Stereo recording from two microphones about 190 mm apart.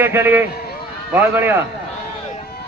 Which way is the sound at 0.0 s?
10° right (ahead or behind).